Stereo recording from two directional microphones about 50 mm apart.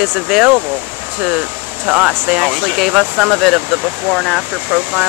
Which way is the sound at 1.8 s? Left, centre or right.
Right.